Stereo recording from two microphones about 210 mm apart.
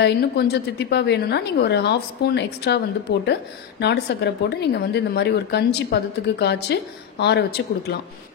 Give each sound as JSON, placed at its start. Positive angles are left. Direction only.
{"t": 0.0, "sound": "a woman's voice", "side_deg": 50}